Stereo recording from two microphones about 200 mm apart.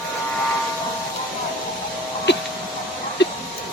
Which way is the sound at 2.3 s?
60° left (ahead or behind).